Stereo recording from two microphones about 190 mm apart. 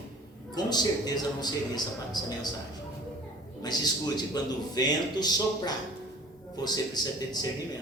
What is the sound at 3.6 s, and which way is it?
A man's voice, 20° left (ahead or behind).